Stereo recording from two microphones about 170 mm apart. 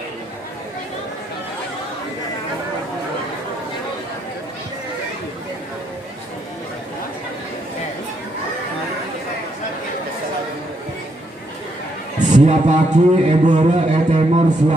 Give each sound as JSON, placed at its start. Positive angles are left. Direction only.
{"t": 12.2, "sound": "a man's voice", "side_deg": -45}